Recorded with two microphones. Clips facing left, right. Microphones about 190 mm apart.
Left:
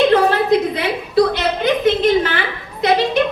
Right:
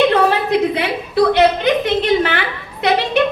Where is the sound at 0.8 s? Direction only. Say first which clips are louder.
Even; 65° right (ahead or behind).